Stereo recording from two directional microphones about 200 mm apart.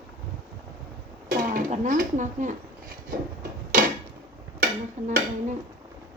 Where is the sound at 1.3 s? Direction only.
45° right (ahead or behind).